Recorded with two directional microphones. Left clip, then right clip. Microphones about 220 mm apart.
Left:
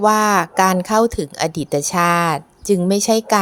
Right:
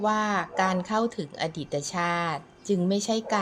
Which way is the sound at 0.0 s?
30° left (ahead or behind).